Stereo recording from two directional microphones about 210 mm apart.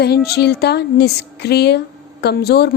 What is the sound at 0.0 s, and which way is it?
A woman's voice, 50° left (ahead or behind).